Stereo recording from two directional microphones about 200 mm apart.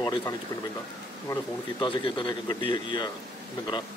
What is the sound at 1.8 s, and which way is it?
Speech, 25° left (ahead or behind).